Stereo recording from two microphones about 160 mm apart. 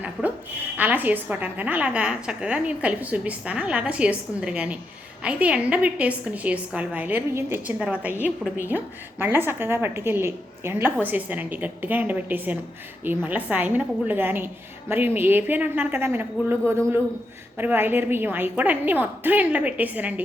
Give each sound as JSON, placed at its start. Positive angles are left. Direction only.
{"t": 0.0, "sound": "a woman's voice", "side_deg": -10}